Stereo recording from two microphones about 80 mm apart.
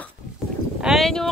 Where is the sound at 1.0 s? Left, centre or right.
Centre.